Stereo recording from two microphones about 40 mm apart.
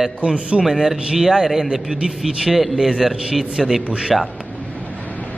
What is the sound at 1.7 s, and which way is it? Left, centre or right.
Speech, right.